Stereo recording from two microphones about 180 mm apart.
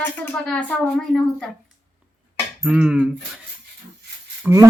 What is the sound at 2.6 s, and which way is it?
Speech, 5° right (ahead or behind).